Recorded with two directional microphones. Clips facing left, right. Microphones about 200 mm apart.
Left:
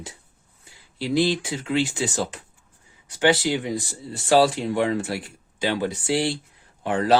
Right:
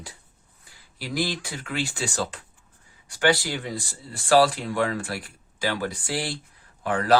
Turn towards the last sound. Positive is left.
turn(degrees=25)  # may be behind; listen again after turning